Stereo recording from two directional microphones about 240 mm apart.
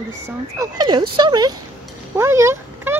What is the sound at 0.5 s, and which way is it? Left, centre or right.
Speech, centre.